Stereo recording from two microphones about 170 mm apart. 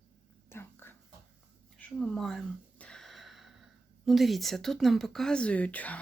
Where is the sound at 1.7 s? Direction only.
5° left (ahead or behind).